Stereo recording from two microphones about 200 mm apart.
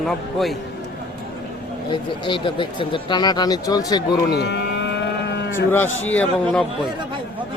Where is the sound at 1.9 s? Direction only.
25° left (ahead or behind).